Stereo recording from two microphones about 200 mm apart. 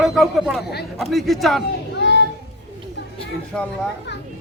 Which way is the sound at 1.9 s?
60° left (ahead or behind).